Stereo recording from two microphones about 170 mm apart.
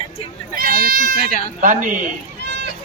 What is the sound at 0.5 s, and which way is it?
Speech, 60° right (ahead or behind).